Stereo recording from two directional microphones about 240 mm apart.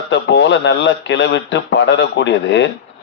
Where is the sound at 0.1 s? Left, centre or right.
Left.